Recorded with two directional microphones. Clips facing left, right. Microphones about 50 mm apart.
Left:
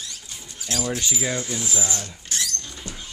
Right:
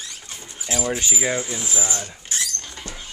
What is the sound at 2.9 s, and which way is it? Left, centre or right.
Dog, right.